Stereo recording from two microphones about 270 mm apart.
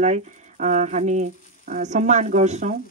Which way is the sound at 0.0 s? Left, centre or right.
Right.